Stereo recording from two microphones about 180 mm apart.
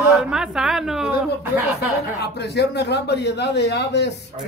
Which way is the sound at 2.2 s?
70° left (ahead or behind).